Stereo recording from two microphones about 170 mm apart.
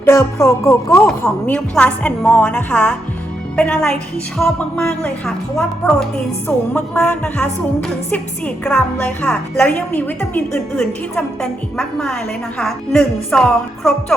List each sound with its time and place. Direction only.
0.0 s music: 15° left (ahead or behind)
0.6 s a woman's voice: 15° left (ahead or behind)